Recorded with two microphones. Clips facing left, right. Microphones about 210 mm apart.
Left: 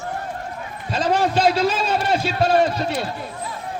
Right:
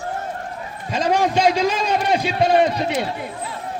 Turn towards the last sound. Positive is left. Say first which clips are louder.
# right 2 dB
turn(degrees=-20)  # may be behind; listen again after turning